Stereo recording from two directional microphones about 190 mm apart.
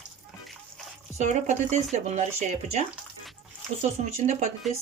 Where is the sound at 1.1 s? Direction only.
40° right (ahead or behind).